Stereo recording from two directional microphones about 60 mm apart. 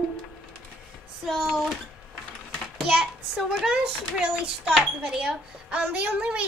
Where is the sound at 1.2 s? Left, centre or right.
Centre.